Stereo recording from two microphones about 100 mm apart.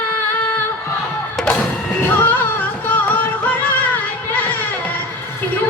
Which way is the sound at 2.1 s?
20° left (ahead or behind).